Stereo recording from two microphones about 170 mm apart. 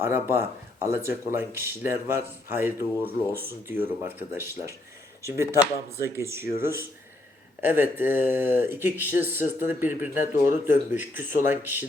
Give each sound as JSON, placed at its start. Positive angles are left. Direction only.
{"t": 0.0, "sound": "speech", "side_deg": -15}